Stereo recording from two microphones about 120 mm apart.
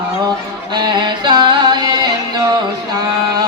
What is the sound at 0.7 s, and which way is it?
Music, 40° right (ahead or behind).